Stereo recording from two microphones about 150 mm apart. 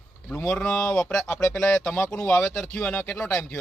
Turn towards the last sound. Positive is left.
turn(degrees=5)  # may be behind; listen again after turning